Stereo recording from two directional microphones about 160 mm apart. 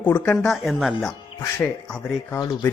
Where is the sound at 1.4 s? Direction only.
10° left (ahead or behind).